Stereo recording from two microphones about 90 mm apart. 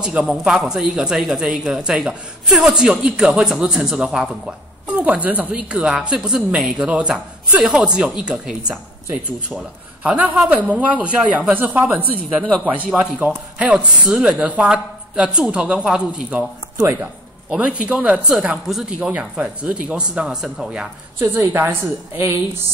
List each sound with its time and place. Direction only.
0.0 s a woman's voice: 10° right (ahead or behind)
21.2 s a woman's voice: 30° right (ahead or behind)